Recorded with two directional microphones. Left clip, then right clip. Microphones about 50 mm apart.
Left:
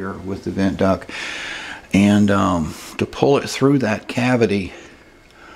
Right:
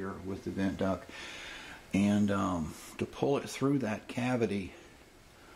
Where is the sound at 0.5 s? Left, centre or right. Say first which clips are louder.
Left 15 dB; left.